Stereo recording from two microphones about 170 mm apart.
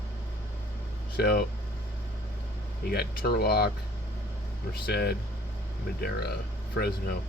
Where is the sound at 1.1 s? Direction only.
65° left (ahead or behind).